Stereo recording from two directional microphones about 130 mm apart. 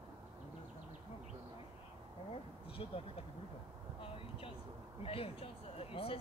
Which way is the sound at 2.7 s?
50° left (ahead or behind).